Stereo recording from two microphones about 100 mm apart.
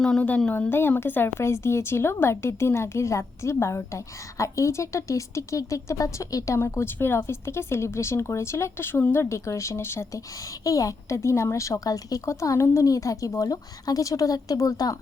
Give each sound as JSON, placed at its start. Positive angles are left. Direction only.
{"t": 0.0, "sound": "a woman's voice", "side_deg": 10}